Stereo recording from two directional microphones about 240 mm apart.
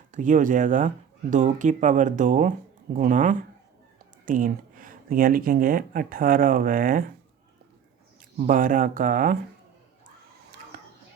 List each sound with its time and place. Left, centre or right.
0.1 s speech: right
8.4 s speech: right
10.7 s a sound: right